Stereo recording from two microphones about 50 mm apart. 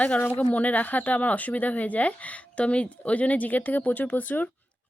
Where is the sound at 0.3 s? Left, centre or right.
Left.